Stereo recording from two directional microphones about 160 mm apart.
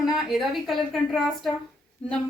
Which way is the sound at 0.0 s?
Centre (ahead or behind).